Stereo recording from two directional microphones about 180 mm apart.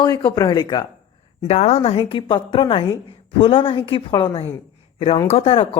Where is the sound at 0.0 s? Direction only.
25° left (ahead or behind).